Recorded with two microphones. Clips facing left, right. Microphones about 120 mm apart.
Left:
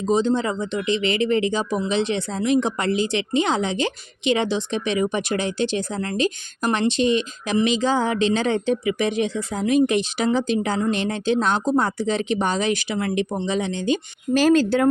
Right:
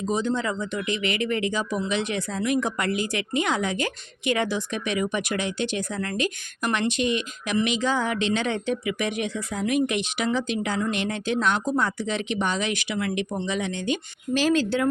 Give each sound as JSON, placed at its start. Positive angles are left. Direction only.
{"t": 0.1, "sound": "a woman's voice", "side_deg": 30}
{"t": 14.3, "sound": "speech", "side_deg": 45}